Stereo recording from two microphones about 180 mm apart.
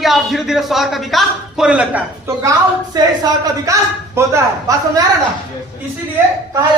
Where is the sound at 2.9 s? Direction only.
20° right (ahead or behind).